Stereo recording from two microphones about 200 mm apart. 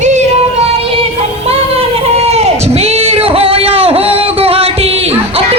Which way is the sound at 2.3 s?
30° right (ahead or behind).